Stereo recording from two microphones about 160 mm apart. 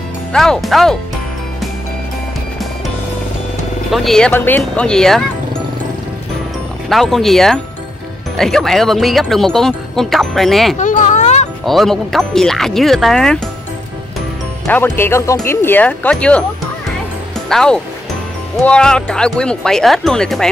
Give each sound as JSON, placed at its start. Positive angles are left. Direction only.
{"t": 0.3, "sound": "speech", "side_deg": 5}
{"t": 3.9, "sound": "speech", "side_deg": 0}
{"t": 6.9, "sound": "speech", "side_deg": 0}
{"t": 10.8, "sound": "a sound", "side_deg": 50}
{"t": 11.6, "sound": "speech", "side_deg": 0}
{"t": 14.7, "sound": "speech", "side_deg": 15}
{"t": 17.5, "sound": "speech", "side_deg": 5}